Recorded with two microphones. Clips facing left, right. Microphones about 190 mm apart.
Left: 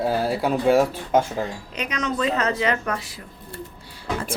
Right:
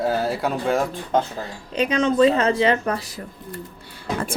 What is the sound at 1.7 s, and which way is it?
Speech, 30° right (ahead or behind).